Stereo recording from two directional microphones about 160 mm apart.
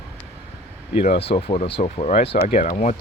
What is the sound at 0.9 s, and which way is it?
Speech, 35° left (ahead or behind).